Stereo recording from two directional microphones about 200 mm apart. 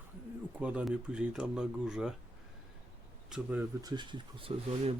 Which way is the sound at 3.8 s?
20° right (ahead or behind).